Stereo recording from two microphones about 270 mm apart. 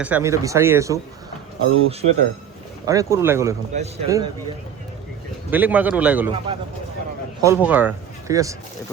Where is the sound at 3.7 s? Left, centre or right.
Right.